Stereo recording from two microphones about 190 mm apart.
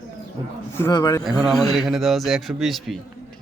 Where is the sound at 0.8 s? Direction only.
20° left (ahead or behind).